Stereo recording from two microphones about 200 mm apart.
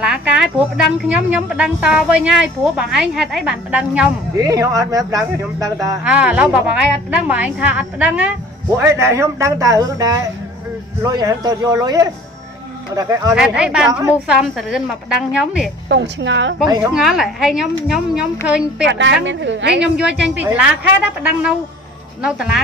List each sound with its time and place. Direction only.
0.0 s a sound: 5° right (ahead or behind)
1.0 s a woman's voice: 5° right (ahead or behind)
4.4 s a woman's voice: 15° right (ahead or behind)
6.0 s a woman's voice: 5° right (ahead or behind)
13.3 s a woman's voice: 5° right (ahead or behind)
15.9 s a woman's voice: 65° right (ahead or behind)
16.9 s a woman's voice: centre (ahead or behind)
18.9 s a woman's voice: 65° right (ahead or behind)
19.8 s a woman's voice: 5° right (ahead or behind)